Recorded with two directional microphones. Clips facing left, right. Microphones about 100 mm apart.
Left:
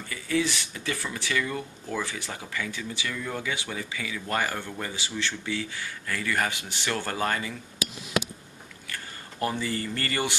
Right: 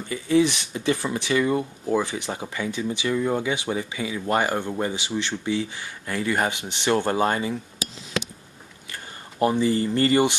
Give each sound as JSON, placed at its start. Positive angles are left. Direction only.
{"t": 0.1, "sound": "speech", "side_deg": -25}
{"t": 9.4, "sound": "speech", "side_deg": -20}